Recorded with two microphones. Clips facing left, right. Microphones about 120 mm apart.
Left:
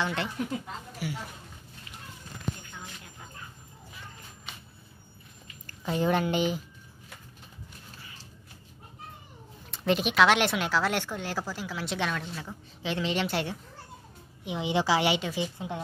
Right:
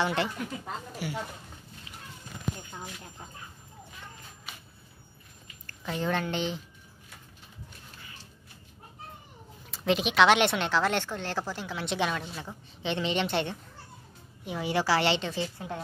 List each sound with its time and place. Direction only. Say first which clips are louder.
0.0 s speech: right 2 dB; centre (ahead or behind)
2.7 s a sound: right 3 dB; 35° right (ahead or behind)
5.7 s a woman's voice: left 4 dB; 15° left (ahead or behind)
9.7 s speech: even; centre (ahead or behind)
14.4 s a woman's voice: left 1 dB; 15° left (ahead or behind)